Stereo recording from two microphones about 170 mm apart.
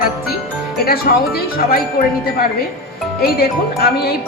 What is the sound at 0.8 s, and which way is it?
Speech, 60° left (ahead or behind).